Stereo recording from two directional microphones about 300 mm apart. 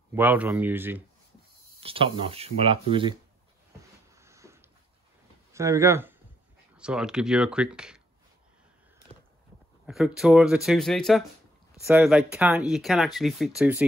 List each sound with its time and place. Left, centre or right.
0.1 s speech: centre
1.8 s speech: centre
4.1 s a sound: centre
5.5 s speech: centre
9.8 s speech: centre